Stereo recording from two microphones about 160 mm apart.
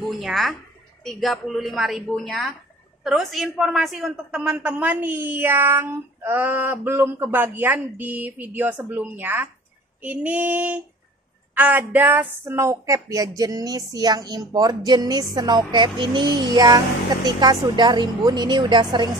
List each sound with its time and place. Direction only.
0.2 s a woman's voice: centre (ahead or behind); by 19.0 s 30° right (ahead or behind)